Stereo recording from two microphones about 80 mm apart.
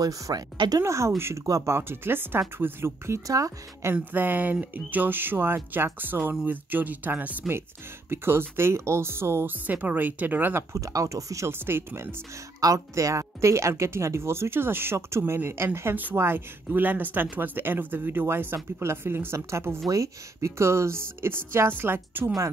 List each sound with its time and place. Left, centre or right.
0.0 s speech: right
0.8 s speech: right
3.3 s speech: right
3.9 s speech: right
9.7 s speech: right
10.7 s speech: right
11.5 s speech: right
12.5 s speech: right